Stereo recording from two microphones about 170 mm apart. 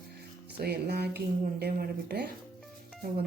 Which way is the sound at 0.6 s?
70° right (ahead or behind).